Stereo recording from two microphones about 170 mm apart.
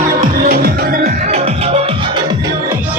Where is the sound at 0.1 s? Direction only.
55° right (ahead or behind); by 2.1 s 30° right (ahead or behind).